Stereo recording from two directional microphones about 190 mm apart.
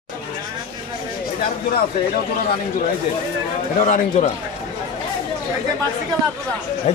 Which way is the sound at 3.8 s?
40° left (ahead or behind).